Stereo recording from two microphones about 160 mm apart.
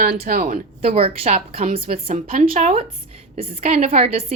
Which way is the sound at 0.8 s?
40° right (ahead or behind).